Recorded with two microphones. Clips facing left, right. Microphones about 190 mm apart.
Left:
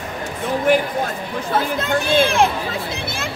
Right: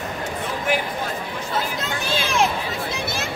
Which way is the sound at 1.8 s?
55° left (ahead or behind).